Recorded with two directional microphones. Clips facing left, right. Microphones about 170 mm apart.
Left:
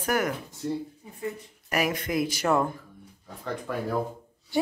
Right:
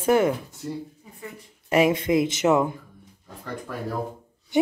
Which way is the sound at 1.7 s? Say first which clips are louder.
Right 7 dB; 25° right (ahead or behind).